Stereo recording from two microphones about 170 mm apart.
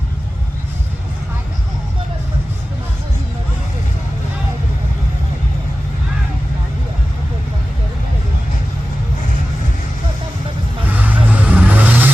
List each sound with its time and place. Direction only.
10.8 s vehicle: 10° right (ahead or behind)